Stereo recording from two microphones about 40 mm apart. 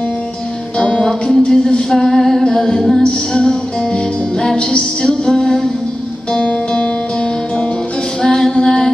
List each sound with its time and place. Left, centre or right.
0.7 s music: left
1.0 s music: centre
3.0 s music: left
8.2 s female singing: centre